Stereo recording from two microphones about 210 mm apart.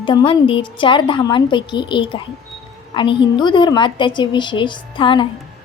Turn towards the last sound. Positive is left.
turn(degrees=25)  # may be behind; listen again after turning